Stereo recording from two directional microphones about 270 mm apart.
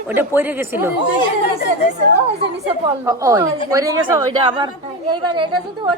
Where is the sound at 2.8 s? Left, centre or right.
Centre.